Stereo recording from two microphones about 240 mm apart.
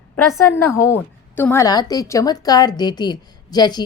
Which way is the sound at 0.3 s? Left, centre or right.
Centre.